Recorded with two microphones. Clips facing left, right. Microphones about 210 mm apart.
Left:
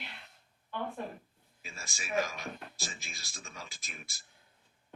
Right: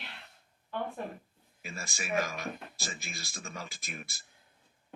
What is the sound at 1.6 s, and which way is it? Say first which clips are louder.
Speech: right 6 dB; 60° right (ahead or behind).